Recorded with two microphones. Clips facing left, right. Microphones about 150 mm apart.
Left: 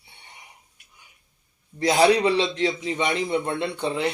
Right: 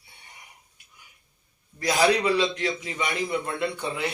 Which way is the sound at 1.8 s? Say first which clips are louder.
Left 4 dB; 25° left (ahead or behind).